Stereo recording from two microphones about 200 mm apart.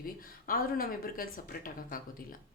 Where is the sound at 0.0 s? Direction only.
45° left (ahead or behind).